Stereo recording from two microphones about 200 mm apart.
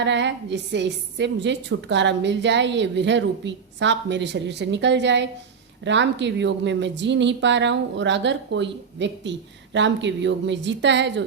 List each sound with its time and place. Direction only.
0.0 s a woman's voice: 65° right (ahead or behind)